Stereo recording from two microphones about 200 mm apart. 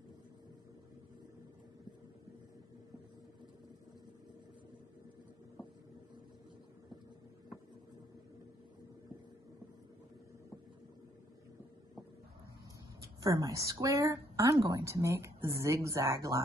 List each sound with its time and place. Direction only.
13.0 s speech: 15° right (ahead or behind)